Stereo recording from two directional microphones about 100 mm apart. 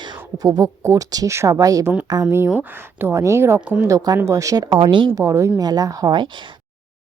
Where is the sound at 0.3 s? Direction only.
40° right (ahead or behind).